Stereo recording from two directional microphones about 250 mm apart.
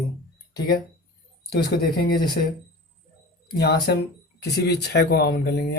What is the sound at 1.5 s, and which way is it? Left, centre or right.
A man's voice, left.